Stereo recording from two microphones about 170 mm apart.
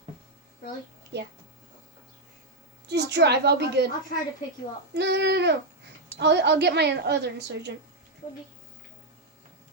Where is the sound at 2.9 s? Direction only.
80° right.